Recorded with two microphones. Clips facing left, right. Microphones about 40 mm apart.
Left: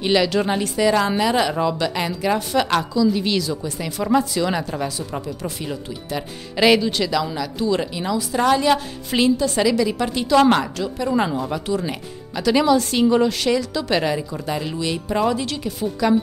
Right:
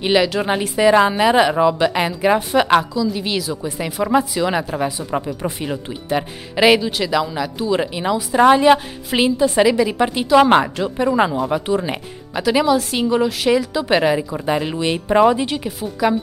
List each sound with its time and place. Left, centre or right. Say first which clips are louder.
0.0 s a woman's voice: right 2 dB; centre
2.9 s a woman's voice: left 2 dB; centre; by 6.6 s right
6.6 s a woman's voice: right 2 dB; centre
12.4 s speech: even; centre
13.5 s a woman's voice: right 4 dB; centre